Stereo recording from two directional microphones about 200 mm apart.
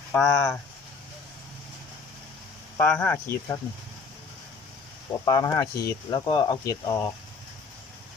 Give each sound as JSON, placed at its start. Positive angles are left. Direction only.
{"t": 0.1, "sound": "speech", "side_deg": 10}
{"t": 2.7, "sound": "speech", "side_deg": 10}
{"t": 5.2, "sound": "speech", "side_deg": 20}